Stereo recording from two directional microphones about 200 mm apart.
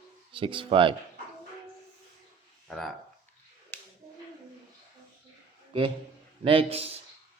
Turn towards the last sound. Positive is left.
turn(degrees=-30)  # may be behind; listen again after turning